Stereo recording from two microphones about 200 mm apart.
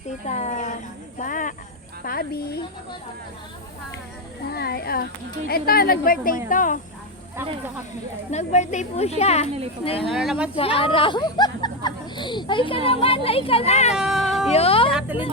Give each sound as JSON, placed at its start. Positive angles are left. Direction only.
{"t": 0.3, "sound": "a sound", "side_deg": 35}
{"t": 1.2, "sound": "cricket", "side_deg": 40}
{"t": 2.0, "sound": "a woman's voice", "side_deg": 50}
{"t": 4.5, "sound": "a woman's voice", "side_deg": 50}
{"t": 8.3, "sound": "a woman's voice", "side_deg": 35}
{"t": 10.0, "sound": "speech", "side_deg": 0}
{"t": 10.5, "sound": "speech", "side_deg": 25}
{"t": 13.9, "sound": "cat", "side_deg": 0}
{"t": 14.5, "sound": "speech", "side_deg": 30}
{"t": 14.9, "sound": "speech", "side_deg": -10}